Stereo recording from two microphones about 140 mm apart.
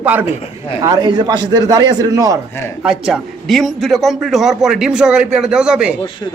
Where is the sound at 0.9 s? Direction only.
30° right (ahead or behind).